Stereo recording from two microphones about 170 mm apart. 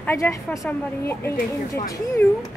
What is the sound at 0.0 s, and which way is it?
A woman's voice, 15° left (ahead or behind).